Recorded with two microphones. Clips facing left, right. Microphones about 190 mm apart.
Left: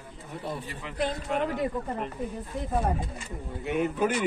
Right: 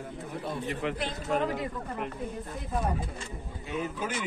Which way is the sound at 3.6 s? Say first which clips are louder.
Left 7 dB; 65° left (ahead or behind).